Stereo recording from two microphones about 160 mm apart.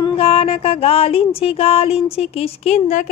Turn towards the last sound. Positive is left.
turn(degrees=45)  # may be behind; listen again after turning